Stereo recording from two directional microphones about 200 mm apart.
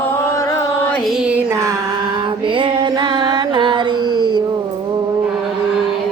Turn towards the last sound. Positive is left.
turn(degrees=-20)  # may be behind; listen again after turning